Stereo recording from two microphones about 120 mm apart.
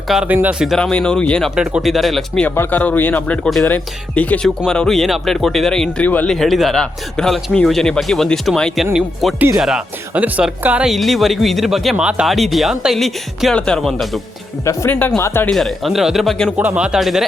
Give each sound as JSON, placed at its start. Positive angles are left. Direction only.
{"t": 0.1, "sound": "speech", "side_deg": -5}
{"t": 0.8, "sound": "speech", "side_deg": 5}
{"t": 1.5, "sound": "speech", "side_deg": -5}
{"t": 2.6, "sound": "speech", "side_deg": 15}
{"t": 6.3, "sound": "speech", "side_deg": 0}
{"t": 14.6, "sound": "speech", "side_deg": 25}
{"t": 14.8, "sound": "speech", "side_deg": 15}
{"t": 15.4, "sound": "speech", "side_deg": 0}
{"t": 16.6, "sound": "a man's voice", "side_deg": -10}